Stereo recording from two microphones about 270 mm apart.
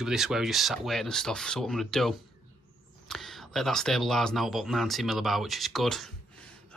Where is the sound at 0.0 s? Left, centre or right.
Centre.